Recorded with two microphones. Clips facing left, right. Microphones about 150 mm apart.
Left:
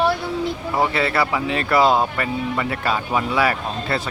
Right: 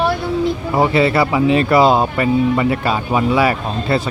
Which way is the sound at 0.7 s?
20° right (ahead or behind).